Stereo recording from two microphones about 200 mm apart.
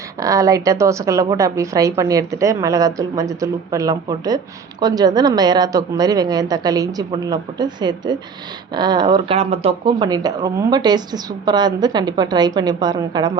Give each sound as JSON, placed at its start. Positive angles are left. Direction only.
{"t": 0.2, "sound": "a woman's voice", "side_deg": -15}